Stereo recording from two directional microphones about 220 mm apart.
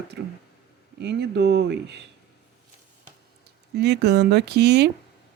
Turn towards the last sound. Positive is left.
turn(degrees=-50)  # may be behind; listen again after turning